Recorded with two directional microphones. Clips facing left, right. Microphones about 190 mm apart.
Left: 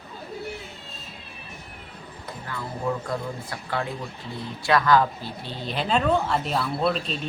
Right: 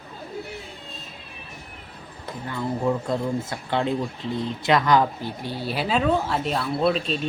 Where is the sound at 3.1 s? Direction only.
25° right (ahead or behind); by 7.2 s centre (ahead or behind).